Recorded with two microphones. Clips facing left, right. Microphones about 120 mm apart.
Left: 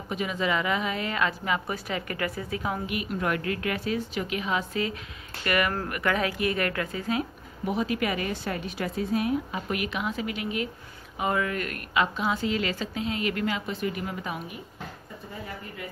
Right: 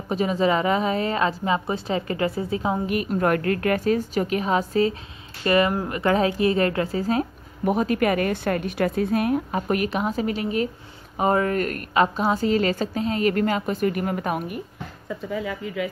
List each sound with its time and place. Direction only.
0.1 s a woman's voice: 35° right (ahead or behind)
2.9 s a woman's voice: 45° right (ahead or behind)
15.0 s speech: 90° right